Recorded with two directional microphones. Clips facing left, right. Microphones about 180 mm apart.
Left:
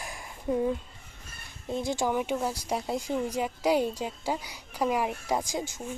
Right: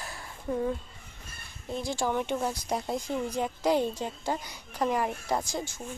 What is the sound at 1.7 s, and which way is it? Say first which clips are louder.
A woman's voice: left 2 dB; 20° left (ahead or behind).